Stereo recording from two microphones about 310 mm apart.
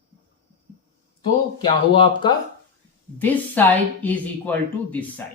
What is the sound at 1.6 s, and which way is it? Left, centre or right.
Speech, centre.